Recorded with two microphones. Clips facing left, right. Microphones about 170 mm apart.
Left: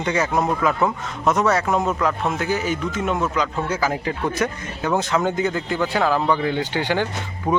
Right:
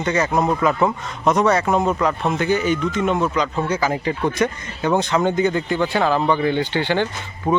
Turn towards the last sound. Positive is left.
turn(degrees=10)  # may be behind; listen again after turning